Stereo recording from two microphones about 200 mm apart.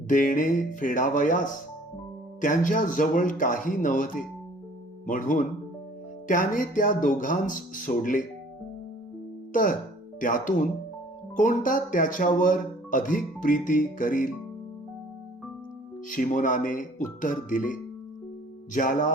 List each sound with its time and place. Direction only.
0.1 s speech: 40° left (ahead or behind)
9.5 s speech: 40° left (ahead or behind)
16.0 s speech: 40° left (ahead or behind)